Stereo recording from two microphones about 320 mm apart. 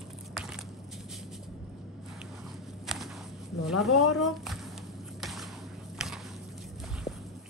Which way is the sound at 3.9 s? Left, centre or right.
Left.